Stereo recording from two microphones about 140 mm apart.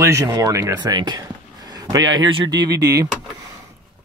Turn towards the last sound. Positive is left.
turn(degrees=-25)  # may be behind; listen again after turning